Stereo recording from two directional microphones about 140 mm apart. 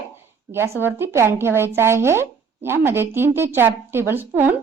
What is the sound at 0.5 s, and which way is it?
A woman's voice, 20° right (ahead or behind).